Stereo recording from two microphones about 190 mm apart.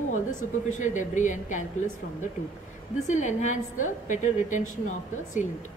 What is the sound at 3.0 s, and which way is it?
A woman's voice, 40° left (ahead or behind).